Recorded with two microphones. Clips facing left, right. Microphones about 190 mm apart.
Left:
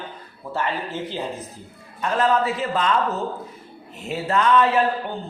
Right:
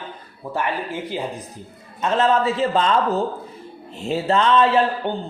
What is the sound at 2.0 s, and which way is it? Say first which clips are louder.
A man's voice: right 2 dB; 25° right (ahead or behind).